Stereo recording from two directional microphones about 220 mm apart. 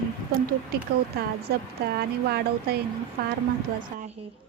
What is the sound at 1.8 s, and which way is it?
Speech, 45° right (ahead or behind).